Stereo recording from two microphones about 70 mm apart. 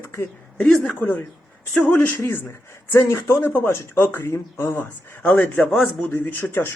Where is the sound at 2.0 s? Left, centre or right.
Left.